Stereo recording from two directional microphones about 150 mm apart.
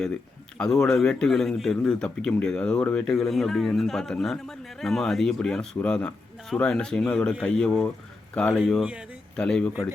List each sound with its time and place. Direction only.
0.6 s a man's voice: 5° left (ahead or behind)